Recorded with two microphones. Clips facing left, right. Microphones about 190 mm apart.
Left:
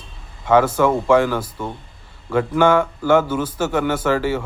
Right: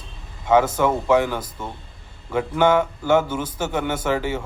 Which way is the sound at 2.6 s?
25° right (ahead or behind).